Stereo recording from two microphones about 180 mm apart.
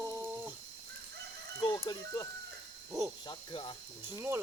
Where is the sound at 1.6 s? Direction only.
20° left (ahead or behind).